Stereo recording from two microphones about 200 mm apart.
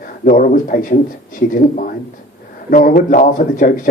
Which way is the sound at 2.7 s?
45° left (ahead or behind).